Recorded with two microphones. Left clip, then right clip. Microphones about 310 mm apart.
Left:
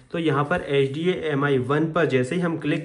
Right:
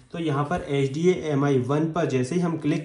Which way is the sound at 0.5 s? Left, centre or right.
Centre.